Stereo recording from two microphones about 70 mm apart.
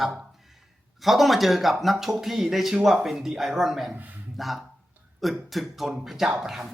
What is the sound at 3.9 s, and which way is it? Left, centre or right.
Speech, right.